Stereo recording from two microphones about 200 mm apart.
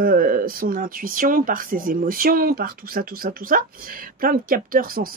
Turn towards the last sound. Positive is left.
turn(degrees=-45)  # may be behind; listen again after turning